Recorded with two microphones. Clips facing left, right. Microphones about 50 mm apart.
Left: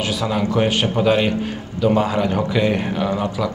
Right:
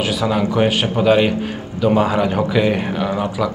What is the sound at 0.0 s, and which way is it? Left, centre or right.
Speech, centre.